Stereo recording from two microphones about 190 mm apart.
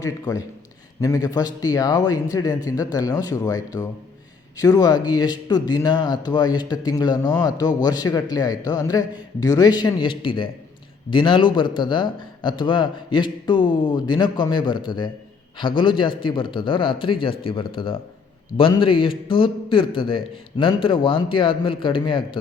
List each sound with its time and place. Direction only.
0.0 s speech: 20° left (ahead or behind)